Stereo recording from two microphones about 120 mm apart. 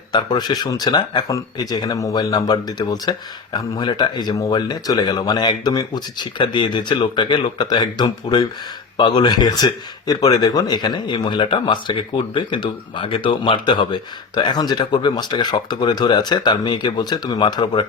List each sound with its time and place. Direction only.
0.1 s speech: 35° left (ahead or behind)